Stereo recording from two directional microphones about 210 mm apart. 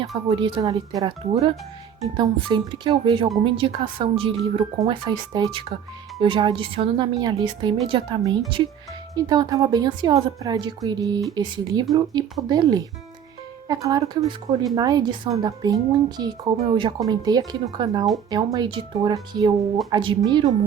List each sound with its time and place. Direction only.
0.3 s speech: 25° right (ahead or behind)